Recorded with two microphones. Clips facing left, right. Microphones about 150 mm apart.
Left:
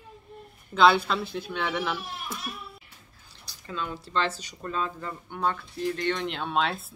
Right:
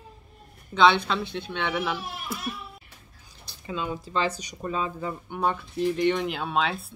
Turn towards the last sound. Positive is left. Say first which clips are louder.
# right 1 dB
turn(degrees=0)  # may be behind; listen again after turning